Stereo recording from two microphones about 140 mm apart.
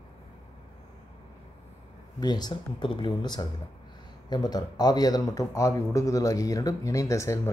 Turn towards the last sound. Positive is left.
turn(degrees=20)  # may be behind; listen again after turning